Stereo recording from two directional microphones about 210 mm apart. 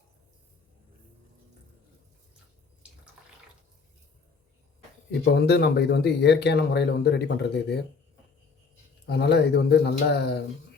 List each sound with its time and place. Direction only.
5.3 s speech: 50° left (ahead or behind)
9.0 s speech: 55° left (ahead or behind)